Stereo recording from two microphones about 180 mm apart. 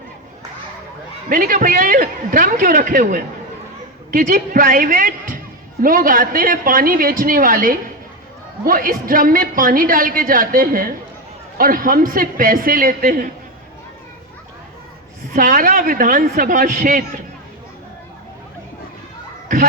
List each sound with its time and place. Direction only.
1.3 s a woman's voice: 50° right (ahead or behind)
15.3 s a woman's voice: 50° right (ahead or behind)